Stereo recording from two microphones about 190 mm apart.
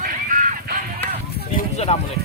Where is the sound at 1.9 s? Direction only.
35° left (ahead or behind).